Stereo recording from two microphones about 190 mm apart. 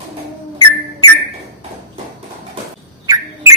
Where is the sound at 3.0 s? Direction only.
20° right (ahead or behind).